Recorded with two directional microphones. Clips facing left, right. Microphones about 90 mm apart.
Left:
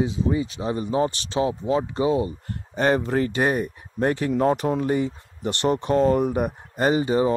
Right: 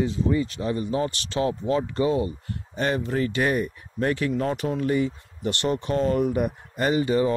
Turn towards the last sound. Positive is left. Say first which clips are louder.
# left 2 dB
turn(degrees=25)  # may be behind; listen again after turning